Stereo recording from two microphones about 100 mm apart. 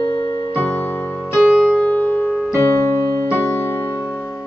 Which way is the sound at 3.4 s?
25° left (ahead or behind).